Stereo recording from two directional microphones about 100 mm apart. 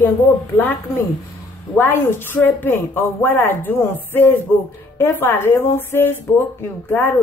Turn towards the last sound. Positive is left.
turn(degrees=25)  # may be behind; listen again after turning